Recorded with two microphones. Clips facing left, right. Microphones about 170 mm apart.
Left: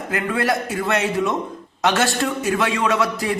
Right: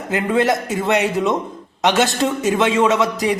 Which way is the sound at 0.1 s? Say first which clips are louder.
Right 4 dB; 20° right (ahead or behind).